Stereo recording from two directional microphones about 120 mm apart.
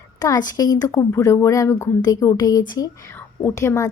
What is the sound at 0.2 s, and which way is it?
A woman's voice, 30° left (ahead or behind).